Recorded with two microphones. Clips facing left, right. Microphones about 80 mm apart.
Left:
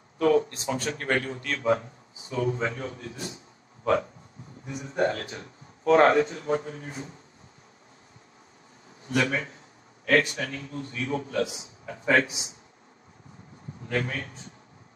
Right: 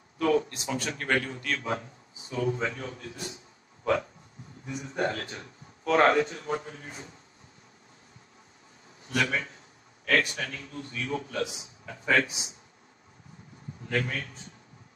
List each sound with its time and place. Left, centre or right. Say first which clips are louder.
0.2 s a man's voice: left 3 dB; left
4.6 s a man's voice: left 4 dB; left
9.1 s a man's voice: left 2 dB; left
13.8 s a man's voice: left 1 dB; left